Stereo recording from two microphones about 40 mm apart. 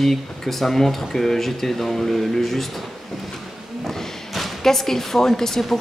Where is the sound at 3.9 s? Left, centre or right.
Centre.